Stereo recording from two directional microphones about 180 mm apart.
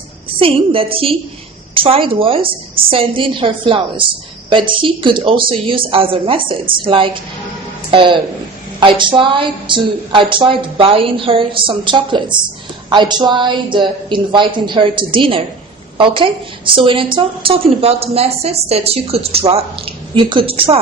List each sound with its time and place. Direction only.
0.3 s a woman's voice: 30° right (ahead or behind)